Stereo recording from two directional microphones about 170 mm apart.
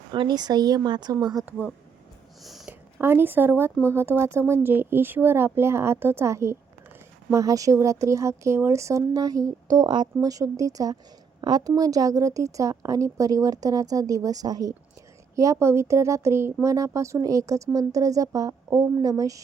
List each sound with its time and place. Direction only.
0.1 s speech: 25° right (ahead or behind)
1.5 s speech: 10° right (ahead or behind)
2.4 s a sound: centre (ahead or behind)
3.0 s speech: 15° right (ahead or behind)